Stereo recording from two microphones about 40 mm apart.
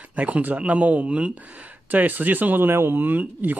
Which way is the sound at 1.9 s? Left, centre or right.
Right.